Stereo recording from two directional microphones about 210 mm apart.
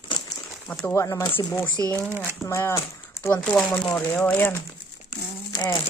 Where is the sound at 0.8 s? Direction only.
15° left (ahead or behind).